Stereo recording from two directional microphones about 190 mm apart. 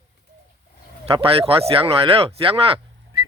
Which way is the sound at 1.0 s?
30° right (ahead or behind).